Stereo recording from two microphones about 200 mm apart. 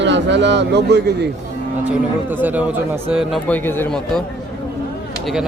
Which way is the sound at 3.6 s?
10° left (ahead or behind).